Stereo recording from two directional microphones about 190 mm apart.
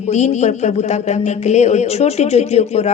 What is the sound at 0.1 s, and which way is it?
Speech, 35° left (ahead or behind).